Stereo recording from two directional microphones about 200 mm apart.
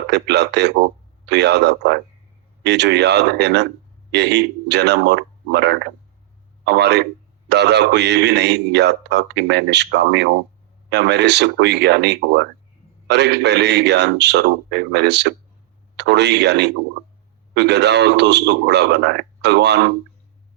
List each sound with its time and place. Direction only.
0.1 s a man's voice: 60° right (ahead or behind)